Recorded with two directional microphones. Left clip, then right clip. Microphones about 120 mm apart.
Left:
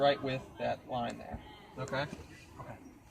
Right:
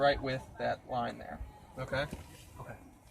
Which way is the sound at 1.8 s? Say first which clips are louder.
Right 1 dB; 30° right (ahead or behind).